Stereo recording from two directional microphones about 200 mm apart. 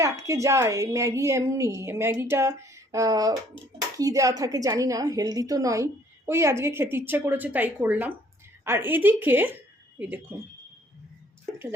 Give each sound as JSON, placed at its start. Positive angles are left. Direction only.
{"t": 0.0, "sound": "a woman's voice", "side_deg": -15}